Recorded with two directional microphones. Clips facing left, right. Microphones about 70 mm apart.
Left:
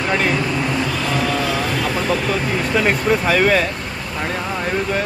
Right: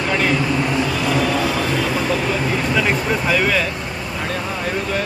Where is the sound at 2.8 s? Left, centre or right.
Left.